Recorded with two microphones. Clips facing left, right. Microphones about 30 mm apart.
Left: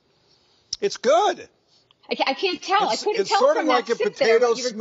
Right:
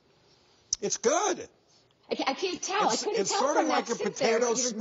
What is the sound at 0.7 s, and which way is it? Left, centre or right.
A woman's voice, left.